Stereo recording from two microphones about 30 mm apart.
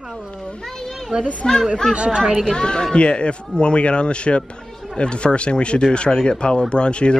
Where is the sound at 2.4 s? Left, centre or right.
Left.